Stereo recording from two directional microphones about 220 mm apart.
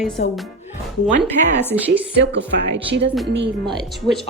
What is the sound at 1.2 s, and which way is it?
Speech, 10° left (ahead or behind).